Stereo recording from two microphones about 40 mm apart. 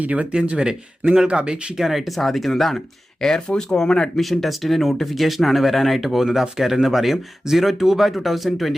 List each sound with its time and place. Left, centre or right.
0.0 s speech: right
0.6 s speech: centre
1.8 s speech: centre
4.2 s speech: centre